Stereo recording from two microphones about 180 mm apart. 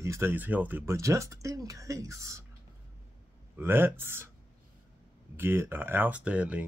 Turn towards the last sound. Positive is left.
turn(degrees=-10)  # may be behind; listen again after turning